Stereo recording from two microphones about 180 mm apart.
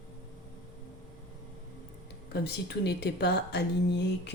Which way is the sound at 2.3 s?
65° left (ahead or behind).